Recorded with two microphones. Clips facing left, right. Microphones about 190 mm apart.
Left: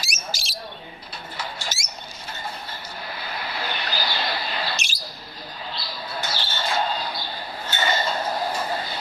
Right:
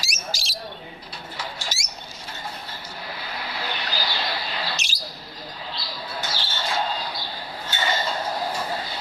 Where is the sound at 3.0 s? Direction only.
55° left (ahead or behind).